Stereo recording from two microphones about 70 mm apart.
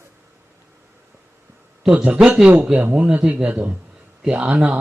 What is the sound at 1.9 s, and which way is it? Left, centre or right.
A man's voice, centre.